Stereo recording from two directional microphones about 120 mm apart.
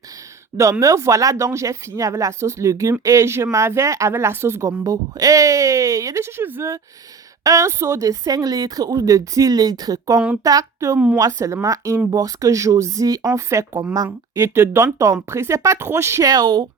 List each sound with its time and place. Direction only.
0.5 s a woman's voice: 25° right (ahead or behind)